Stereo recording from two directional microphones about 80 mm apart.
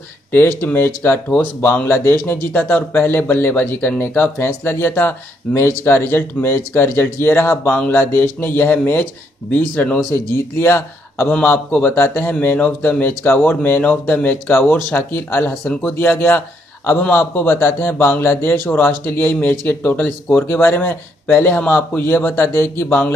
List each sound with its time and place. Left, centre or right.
0.3 s speech: left
10.3 s a man's voice: left